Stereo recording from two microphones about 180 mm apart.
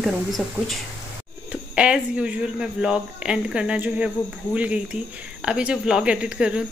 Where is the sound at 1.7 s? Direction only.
5° right (ahead or behind).